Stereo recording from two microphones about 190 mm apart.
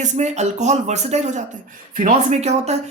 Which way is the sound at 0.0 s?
40° right (ahead or behind).